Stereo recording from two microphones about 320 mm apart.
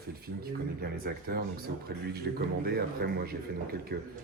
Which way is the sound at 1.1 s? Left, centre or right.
Right.